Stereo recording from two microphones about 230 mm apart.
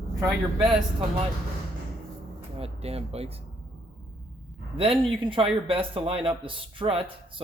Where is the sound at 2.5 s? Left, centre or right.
Right.